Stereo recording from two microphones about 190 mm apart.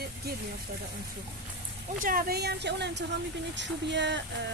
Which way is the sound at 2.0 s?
50° right (ahead or behind).